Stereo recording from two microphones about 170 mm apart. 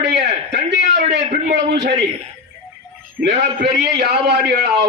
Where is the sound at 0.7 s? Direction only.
80° right.